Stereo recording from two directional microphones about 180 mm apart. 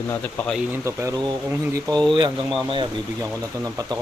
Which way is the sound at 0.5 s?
15° right (ahead or behind).